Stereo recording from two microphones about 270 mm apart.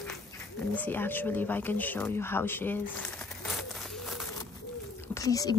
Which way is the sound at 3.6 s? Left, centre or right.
Centre.